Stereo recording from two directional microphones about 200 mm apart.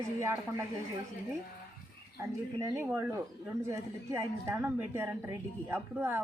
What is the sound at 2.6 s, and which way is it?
A woman's voice, 15° right (ahead or behind).